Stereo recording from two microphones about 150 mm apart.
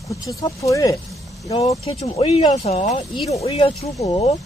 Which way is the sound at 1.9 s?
40° left (ahead or behind).